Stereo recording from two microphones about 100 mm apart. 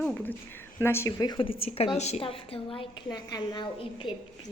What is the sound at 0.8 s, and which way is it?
Speech, 25° left (ahead or behind).